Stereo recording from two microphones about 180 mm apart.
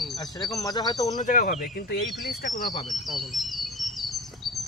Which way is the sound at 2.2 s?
50° left (ahead or behind).